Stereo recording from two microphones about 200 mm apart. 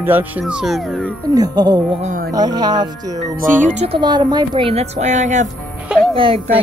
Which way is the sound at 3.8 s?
25° right (ahead or behind).